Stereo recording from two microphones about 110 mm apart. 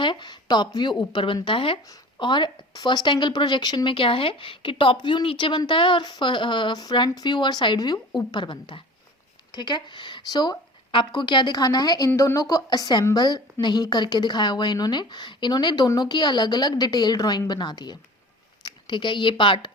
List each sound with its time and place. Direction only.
0.0 s a woman's voice: 45° left (ahead or behind)